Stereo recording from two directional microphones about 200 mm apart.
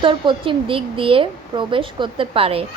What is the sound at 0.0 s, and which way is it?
A woman's voice, 25° right (ahead or behind).